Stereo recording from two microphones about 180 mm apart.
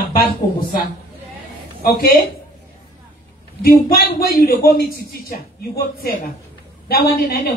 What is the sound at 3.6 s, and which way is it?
A man's voice, 55° left (ahead or behind).